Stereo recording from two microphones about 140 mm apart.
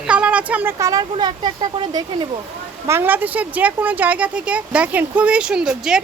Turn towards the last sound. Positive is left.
turn(degrees=-5)  # may be behind; listen again after turning